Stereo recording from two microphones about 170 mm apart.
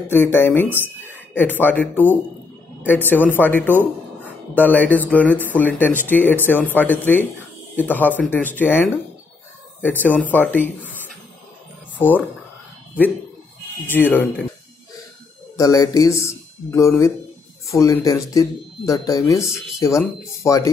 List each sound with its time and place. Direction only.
0.1 s speech: 10° left (ahead or behind)
13.8 s speech: 10° left (ahead or behind)
15.5 s speech: 20° left (ahead or behind)